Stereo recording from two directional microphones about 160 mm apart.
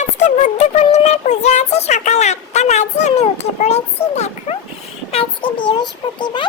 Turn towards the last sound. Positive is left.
turn(degrees=30)  # may be behind; listen again after turning